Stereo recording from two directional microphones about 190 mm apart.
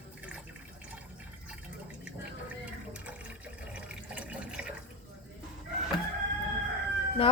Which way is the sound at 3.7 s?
5° right (ahead or behind).